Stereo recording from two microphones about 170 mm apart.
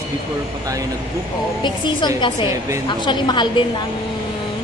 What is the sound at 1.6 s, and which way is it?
Speech, 25° left (ahead or behind).